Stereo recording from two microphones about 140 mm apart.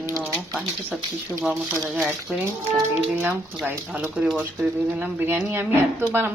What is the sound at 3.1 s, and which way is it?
A woman's voice, 15° right (ahead or behind).